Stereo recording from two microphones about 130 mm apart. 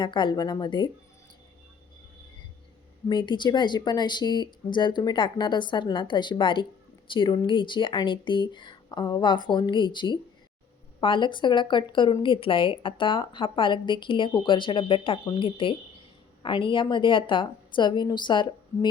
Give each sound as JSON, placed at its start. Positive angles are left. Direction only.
{"t": 0.0, "sound": "speech", "side_deg": 35}
{"t": 3.1, "sound": "speech", "side_deg": 35}